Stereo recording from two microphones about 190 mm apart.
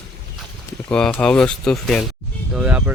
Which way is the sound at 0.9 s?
5° left (ahead or behind).